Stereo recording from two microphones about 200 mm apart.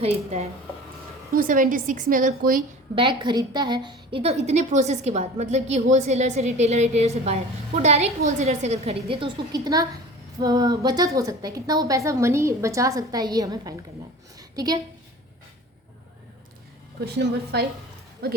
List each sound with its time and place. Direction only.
0.0 s a woman's voice: 35° right (ahead or behind)
2.9 s a woman's voice: 25° right (ahead or behind)
17.1 s speech: 55° right (ahead or behind)